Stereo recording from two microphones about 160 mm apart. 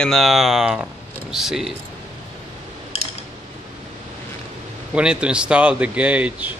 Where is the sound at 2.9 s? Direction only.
40° left (ahead or behind).